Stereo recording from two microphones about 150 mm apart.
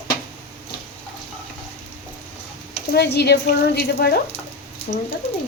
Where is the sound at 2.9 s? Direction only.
90° left.